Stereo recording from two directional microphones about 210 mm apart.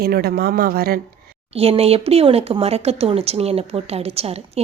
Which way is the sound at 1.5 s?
30° right (ahead or behind).